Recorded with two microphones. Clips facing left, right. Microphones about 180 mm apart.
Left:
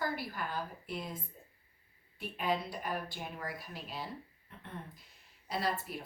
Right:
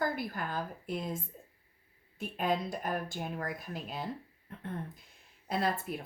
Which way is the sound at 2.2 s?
45° right (ahead or behind).